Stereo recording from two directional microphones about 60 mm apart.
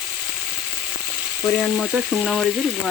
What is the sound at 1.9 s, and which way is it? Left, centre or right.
Frying, centre.